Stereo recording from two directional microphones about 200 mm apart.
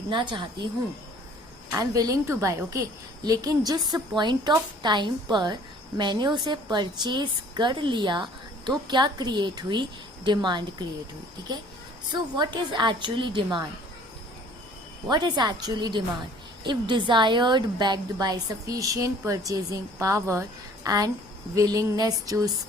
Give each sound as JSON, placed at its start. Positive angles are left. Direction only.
{"t": 0.1, "sound": "a woman's voice", "side_deg": -25}
{"t": 1.7, "sound": "a woman's voice", "side_deg": -15}
{"t": 12.1, "sound": "a woman's voice", "side_deg": -20}
{"t": 15.1, "sound": "a woman's voice", "side_deg": -20}